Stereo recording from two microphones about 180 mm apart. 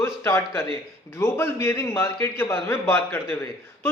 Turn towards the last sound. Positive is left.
turn(degrees=10)  # may be behind; listen again after turning